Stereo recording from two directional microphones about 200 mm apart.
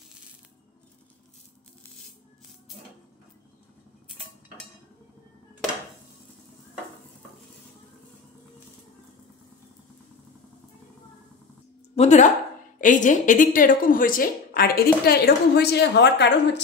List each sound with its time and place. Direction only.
11.9 s a woman's voice: 35° left (ahead or behind); by 16.6 s 60° left (ahead or behind)